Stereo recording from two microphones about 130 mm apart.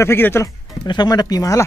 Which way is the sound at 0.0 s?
20° left (ahead or behind).